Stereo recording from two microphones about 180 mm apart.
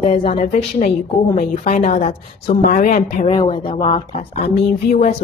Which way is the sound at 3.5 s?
30° left (ahead or behind).